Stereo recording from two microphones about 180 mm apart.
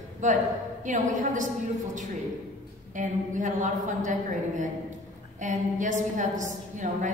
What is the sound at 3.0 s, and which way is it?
A woman's voice, 45° right (ahead or behind).